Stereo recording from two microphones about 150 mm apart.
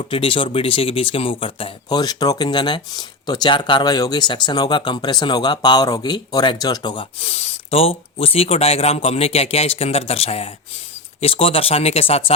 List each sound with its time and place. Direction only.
0.1 s speech: 35° left (ahead or behind)